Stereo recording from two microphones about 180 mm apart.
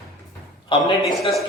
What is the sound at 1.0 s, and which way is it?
Speech, centre (ahead or behind).